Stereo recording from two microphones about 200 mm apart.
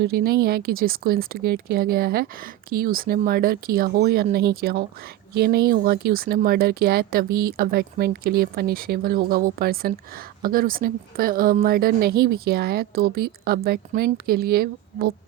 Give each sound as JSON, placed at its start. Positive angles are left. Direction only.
{"t": 0.0, "sound": "speech", "side_deg": -50}